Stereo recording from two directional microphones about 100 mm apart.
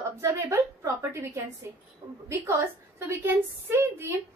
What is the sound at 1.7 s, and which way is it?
A woman's voice, 25° right (ahead or behind).